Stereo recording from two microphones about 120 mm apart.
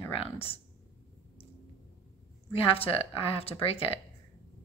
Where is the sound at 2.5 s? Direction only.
50° left (ahead or behind).